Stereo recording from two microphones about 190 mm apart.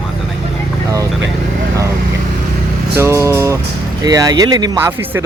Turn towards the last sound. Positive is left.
turn(degrees=-15)  # may be behind; listen again after turning